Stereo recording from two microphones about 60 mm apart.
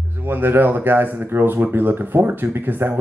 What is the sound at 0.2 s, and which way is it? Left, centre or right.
Speech, right.